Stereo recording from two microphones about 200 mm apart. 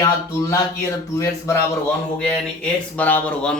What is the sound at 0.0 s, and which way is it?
A man's voice, 15° left (ahead or behind).